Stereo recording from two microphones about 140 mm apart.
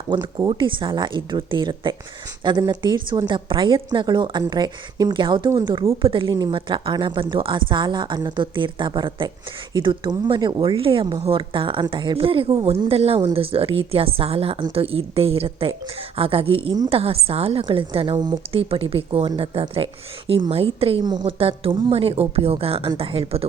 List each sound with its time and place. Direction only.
0.1 s a woman's voice: 30° right (ahead or behind)
6.0 s a woman's voice: 40° right (ahead or behind)
21.0 s a woman's voice: 30° right (ahead or behind)
21.3 s speech: 45° right (ahead or behind)